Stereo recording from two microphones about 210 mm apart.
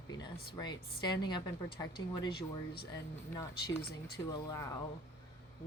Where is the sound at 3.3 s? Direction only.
15° left (ahead or behind).